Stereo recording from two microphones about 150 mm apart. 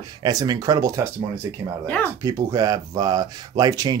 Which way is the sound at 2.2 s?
25° right (ahead or behind).